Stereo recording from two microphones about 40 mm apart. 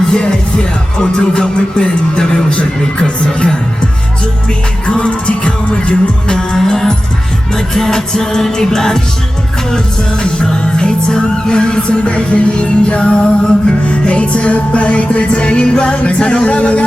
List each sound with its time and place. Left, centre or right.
0.1 s music: centre
0.9 s speech: left
4.9 s music: left
10.2 s speech: centre